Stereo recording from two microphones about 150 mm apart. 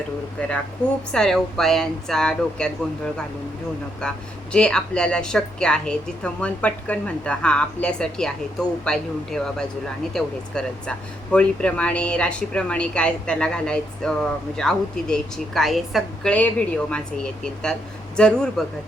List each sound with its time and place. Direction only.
0.3 s speech: 5° left (ahead or behind)
4.0 s speech: 5° left (ahead or behind)